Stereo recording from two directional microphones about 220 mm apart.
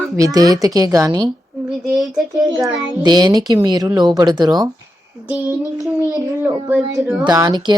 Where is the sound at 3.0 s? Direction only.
20° right (ahead or behind).